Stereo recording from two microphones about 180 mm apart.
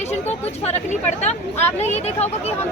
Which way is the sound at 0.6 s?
40° left (ahead or behind).